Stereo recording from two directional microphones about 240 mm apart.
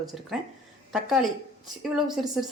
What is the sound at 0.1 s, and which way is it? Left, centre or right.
Speech, centre.